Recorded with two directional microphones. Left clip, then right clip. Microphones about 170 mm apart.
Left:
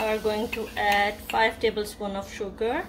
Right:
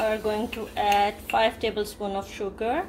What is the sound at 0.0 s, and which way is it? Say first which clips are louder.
Speech: even; 15° right (ahead or behind).